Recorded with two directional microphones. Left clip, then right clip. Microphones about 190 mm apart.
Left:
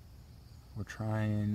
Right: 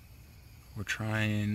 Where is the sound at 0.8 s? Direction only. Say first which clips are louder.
Right 6 dB; 10° right (ahead or behind).